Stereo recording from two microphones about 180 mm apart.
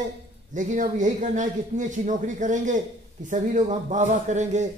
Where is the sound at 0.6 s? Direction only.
45° right (ahead or behind).